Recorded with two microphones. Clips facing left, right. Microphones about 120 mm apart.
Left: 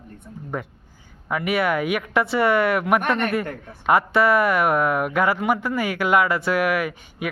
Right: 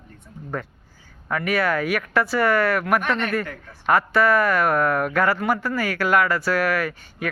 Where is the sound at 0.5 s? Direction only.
15° left (ahead or behind).